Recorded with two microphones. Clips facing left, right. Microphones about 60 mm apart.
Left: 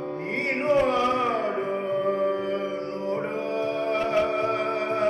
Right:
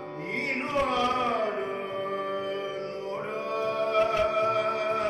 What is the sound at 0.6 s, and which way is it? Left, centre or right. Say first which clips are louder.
Music: left 5 dB; left.